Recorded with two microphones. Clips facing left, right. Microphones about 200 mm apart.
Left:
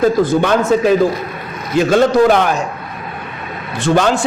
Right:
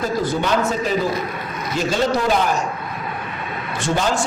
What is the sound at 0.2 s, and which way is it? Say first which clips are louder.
A man's voice: left 6 dB; 55° left (ahead or behind).